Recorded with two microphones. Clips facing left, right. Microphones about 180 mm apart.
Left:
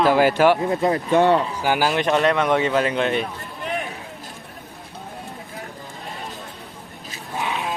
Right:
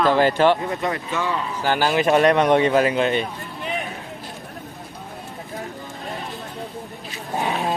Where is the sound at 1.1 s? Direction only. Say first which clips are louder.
Left 14 dB; 60° left (ahead or behind).